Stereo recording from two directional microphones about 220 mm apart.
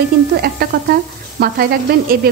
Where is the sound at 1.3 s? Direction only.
45° right (ahead or behind).